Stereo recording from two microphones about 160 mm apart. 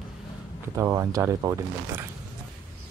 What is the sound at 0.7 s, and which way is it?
Speech, 20° right (ahead or behind).